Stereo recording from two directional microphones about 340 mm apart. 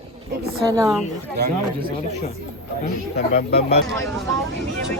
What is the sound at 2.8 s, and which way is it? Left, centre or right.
Speech, left.